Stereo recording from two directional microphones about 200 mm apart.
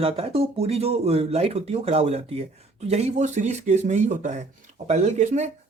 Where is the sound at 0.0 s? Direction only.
30° right (ahead or behind).